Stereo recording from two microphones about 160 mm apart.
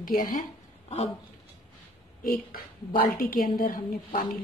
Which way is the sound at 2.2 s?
70° left (ahead or behind).